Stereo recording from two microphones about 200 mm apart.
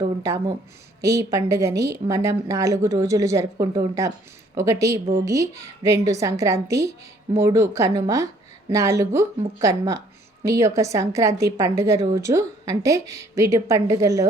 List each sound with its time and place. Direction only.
0.0 s a woman's voice: 15° right (ahead or behind)